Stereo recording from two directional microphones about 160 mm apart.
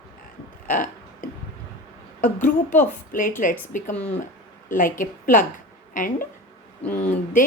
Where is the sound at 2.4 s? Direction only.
55° left (ahead or behind).